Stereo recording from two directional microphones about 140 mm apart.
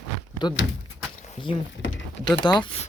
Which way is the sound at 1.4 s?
35° left (ahead or behind).